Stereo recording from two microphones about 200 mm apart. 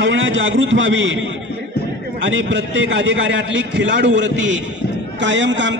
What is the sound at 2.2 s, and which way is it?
A man's voice, 70° right (ahead or behind).